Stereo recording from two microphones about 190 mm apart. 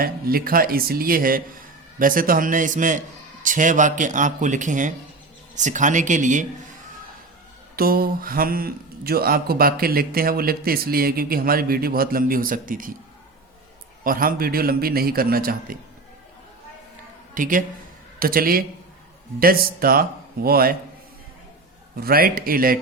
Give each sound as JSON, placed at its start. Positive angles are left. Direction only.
{"t": 0.0, "sound": "speech", "side_deg": -50}
{"t": 7.8, "sound": "speech", "side_deg": -50}
{"t": 14.0, "sound": "speech", "side_deg": -50}
{"t": 17.3, "sound": "a man's voice", "side_deg": -45}
{"t": 22.0, "sound": "speech", "side_deg": -50}